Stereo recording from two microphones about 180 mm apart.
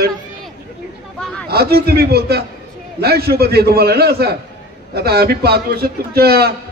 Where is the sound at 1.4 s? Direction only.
60° right (ahead or behind).